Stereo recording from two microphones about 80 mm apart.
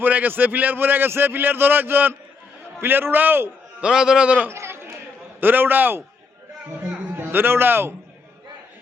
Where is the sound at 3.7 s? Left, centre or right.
Centre.